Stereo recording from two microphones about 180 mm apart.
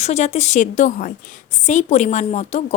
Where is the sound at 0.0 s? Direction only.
40° left (ahead or behind).